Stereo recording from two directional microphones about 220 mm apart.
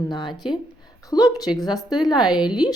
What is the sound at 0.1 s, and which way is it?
A woman's voice, 20° left (ahead or behind).